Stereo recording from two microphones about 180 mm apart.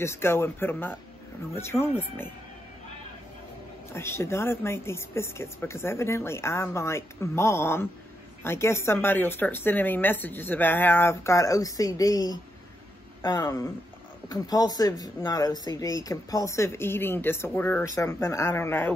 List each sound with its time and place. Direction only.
0.0 s speech: 15° left (ahead or behind)
3.9 s speech: 15° left (ahead or behind)